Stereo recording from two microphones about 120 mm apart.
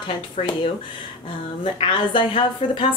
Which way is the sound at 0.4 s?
65° left (ahead or behind).